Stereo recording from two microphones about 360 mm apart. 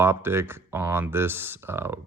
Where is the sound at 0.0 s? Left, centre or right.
Centre.